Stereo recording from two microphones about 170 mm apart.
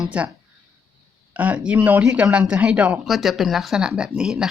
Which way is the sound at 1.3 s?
10° right (ahead or behind).